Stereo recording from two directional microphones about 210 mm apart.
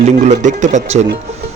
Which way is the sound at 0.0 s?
35° right (ahead or behind).